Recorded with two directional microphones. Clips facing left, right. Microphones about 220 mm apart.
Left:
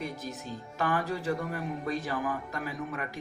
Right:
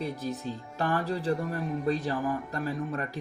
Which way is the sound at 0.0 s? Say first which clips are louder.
Right 5 dB; 35° right (ahead or behind).